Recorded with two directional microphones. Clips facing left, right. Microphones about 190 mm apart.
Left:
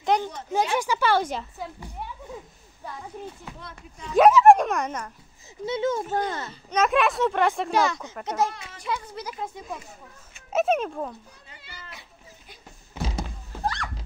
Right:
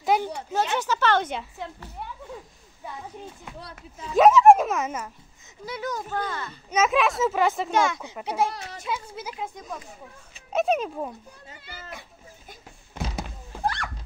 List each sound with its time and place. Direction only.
0.0 s a sound: 5° right (ahead or behind)
0.5 s speech: 10° left (ahead or behind)
1.3 s a child's voice: centre (ahead or behind)
4.0 s a child's voice: centre (ahead or behind)
5.7 s speech: 25° left (ahead or behind)
6.0 s speech: 35° left (ahead or behind)
6.7 s a child's voice: centre (ahead or behind)
8.0 s a child's voice: 10° right (ahead or behind)
9.3 s a child's voice: 5° left (ahead or behind)
11.4 s cat: 45° right (ahead or behind)
13.1 s thunk: 5° right (ahead or behind)